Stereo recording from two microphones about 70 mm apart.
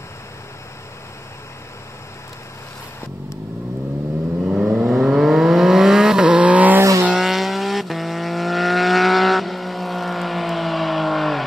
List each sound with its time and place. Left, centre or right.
4.6 s vehicle: centre
6.8 s vehicle: right
7.2 s vehicle: centre